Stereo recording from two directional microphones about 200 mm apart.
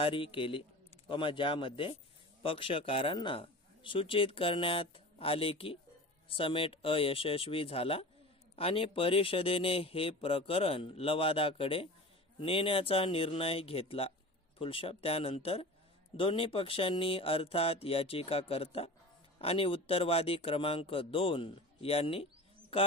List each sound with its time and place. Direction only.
0.0 s speech: 25° left (ahead or behind)